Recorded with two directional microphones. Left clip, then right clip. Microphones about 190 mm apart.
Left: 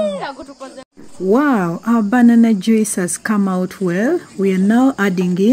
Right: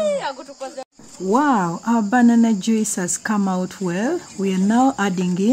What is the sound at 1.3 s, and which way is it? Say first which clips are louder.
Speech: left 2 dB; 10° left (ahead or behind).